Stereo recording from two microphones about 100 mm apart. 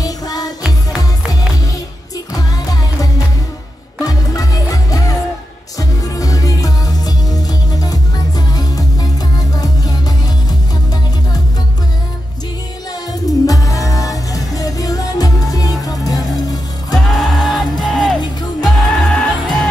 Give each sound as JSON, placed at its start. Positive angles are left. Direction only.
{"t": 0.0, "sound": "music", "side_deg": 40}
{"t": 0.7, "sound": "music", "side_deg": -5}
{"t": 2.3, "sound": "music", "side_deg": 40}
{"t": 13.5, "sound": "music", "side_deg": 35}
{"t": 17.0, "sound": "music", "side_deg": 0}